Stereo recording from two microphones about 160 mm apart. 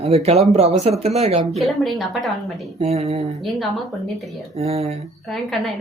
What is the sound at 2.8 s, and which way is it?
Speech, 40° right (ahead or behind).